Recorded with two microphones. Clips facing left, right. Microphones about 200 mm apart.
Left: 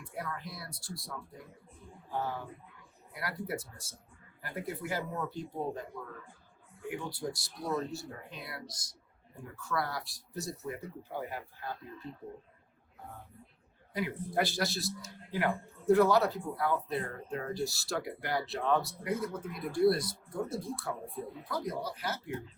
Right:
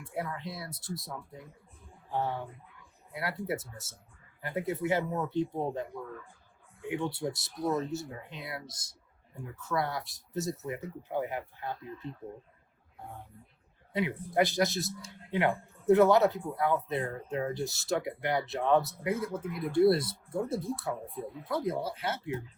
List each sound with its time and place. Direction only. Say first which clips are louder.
0.0 s speech: right 4 dB; 25° right (ahead or behind)
3.1 s speech: right 4 dB; 25° right (ahead or behind)
6.8 s speech: right 4 dB; 25° right (ahead or behind)
13.9 s speech: right 3 dB; 20° right (ahead or behind)